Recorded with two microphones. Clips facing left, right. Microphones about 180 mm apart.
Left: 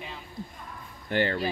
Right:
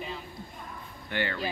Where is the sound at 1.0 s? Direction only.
40° left (ahead or behind).